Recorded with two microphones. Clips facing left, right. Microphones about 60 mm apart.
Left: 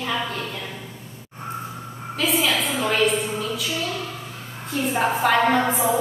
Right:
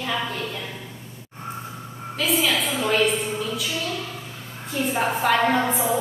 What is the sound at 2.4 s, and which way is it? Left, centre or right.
Speech, centre.